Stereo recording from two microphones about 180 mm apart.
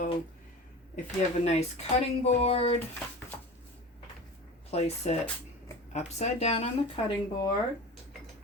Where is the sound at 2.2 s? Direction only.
35° left (ahead or behind).